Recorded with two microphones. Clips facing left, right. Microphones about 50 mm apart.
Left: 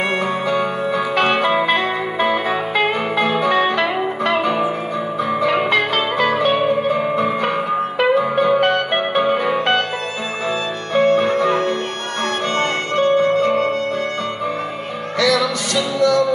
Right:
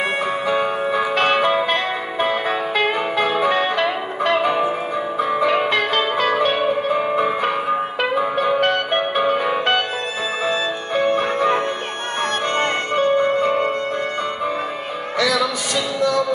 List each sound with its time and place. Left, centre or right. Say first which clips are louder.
0.2 s music: left 1 dB; centre
1.1 s music: left 1 dB; centre
8.5 s music: left 2 dB; centre
10.9 s music: left 5 dB; centre
11.3 s music: left 2 dB; centre